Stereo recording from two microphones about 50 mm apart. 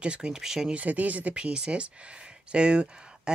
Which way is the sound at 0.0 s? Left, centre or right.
Centre.